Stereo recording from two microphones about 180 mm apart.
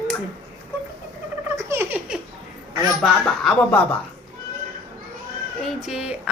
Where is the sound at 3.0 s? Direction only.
Centre (ahead or behind).